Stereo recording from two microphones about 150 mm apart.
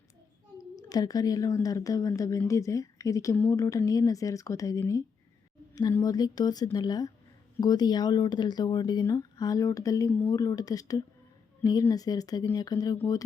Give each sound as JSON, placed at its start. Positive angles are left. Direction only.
{"t": 0.8, "sound": "a woman's voice", "side_deg": 25}
{"t": 10.1, "sound": "speech", "side_deg": 10}
{"t": 10.3, "sound": "a woman's voice", "side_deg": 25}